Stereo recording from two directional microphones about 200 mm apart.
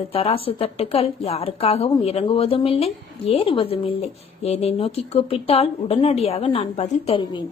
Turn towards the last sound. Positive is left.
turn(degrees=25)  # may be behind; listen again after turning